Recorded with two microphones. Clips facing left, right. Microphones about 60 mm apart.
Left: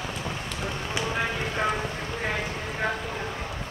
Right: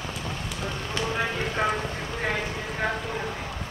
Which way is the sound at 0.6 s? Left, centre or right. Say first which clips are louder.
Even; centre.